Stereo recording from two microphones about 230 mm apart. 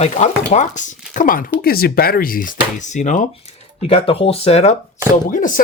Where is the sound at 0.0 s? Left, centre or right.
Left.